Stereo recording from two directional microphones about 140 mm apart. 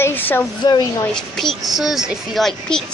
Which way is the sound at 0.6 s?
30° left (ahead or behind).